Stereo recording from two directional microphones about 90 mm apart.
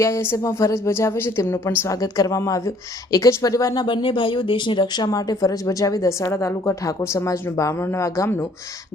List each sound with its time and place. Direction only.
0.0 s a woman's voice: 30° left (ahead or behind)
1.8 s a woman's voice: 40° left (ahead or behind)
3.8 s speech: 65° left (ahead or behind)
5.0 s a woman's voice: 45° left (ahead or behind)
7.7 s speech: 25° left (ahead or behind)